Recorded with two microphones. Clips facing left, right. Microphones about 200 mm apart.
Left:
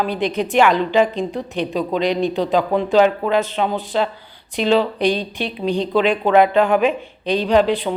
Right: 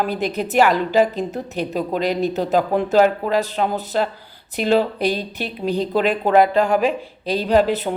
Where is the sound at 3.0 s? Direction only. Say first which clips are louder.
Left 1 dB; 40° right (ahead or behind).